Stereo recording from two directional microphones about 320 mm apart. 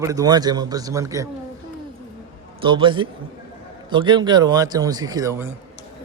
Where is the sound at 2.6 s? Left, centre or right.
Centre.